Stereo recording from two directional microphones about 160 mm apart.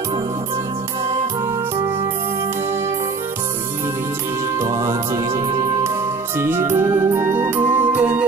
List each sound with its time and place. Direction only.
4.6 s music: 20° right (ahead or behind)